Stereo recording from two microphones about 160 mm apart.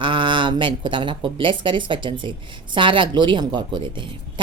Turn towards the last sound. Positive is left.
turn(degrees=-30)  # may be behind; listen again after turning